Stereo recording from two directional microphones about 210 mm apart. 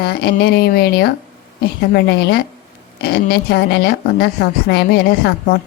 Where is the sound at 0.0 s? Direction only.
50° left (ahead or behind).